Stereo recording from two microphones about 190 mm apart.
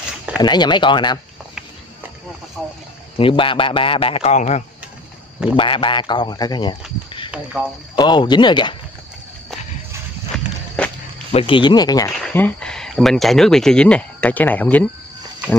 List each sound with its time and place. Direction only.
0.4 s a man's voice: 20° left (ahead or behind)
2.6 s speech: centre (ahead or behind)
3.2 s a man's voice: 25° left (ahead or behind)
5.6 s a man's voice: 25° left (ahead or behind)
7.9 s a man's voice: 25° left (ahead or behind)
10.8 s a sound: 5° left (ahead or behind)
11.3 s a man's voice: 25° left (ahead or behind)
12.2 s speech: 10° left (ahead or behind)